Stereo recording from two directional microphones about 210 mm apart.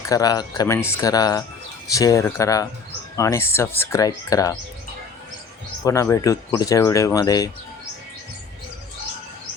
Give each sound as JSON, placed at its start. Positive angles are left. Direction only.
{"t": 0.1, "sound": "speech", "side_deg": 15}
{"t": 5.8, "sound": "speech", "side_deg": 15}